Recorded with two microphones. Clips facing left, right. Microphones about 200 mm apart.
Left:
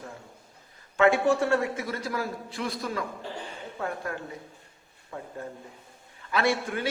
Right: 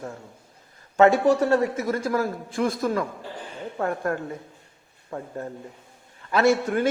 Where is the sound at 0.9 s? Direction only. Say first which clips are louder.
Right 4 dB; 40° right (ahead or behind).